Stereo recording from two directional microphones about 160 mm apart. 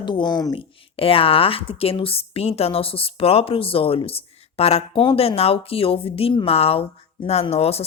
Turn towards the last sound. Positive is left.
turn(degrees=40)  # may be behind; listen again after turning